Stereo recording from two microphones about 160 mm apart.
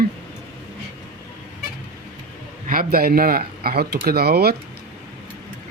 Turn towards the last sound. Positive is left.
turn(degrees=-80)